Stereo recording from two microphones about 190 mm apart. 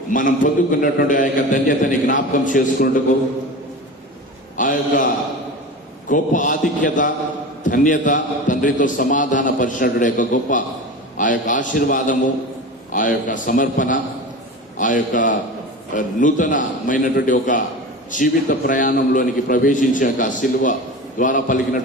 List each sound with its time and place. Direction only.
0.1 s a man's voice: 45° left (ahead or behind)
4.5 s a man's voice: 45° left (ahead or behind)